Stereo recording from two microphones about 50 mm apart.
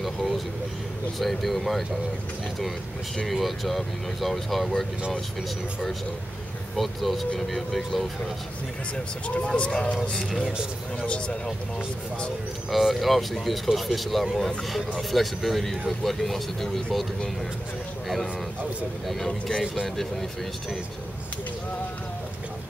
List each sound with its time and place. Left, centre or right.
0.0 s vehicle: centre
1.2 s speech: centre
3.3 s speech: centre
6.8 s speech: centre
9.6 s speech: left
10.1 s speech: centre
11.1 s speech: centre
12.7 s speech: centre
18.0 s speech: centre